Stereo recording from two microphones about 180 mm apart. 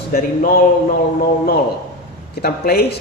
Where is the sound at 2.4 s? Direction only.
60° left (ahead or behind).